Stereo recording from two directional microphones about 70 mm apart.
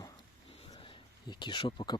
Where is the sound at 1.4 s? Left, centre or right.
Left.